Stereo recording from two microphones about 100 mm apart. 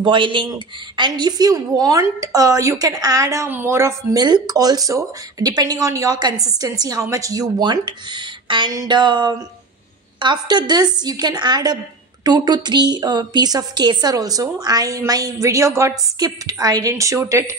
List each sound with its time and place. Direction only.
0.0 s a woman's voice: 55° right (ahead or behind); by 4.2 s 25° right (ahead or behind)
4.2 s a woman's voice: 40° right (ahead or behind)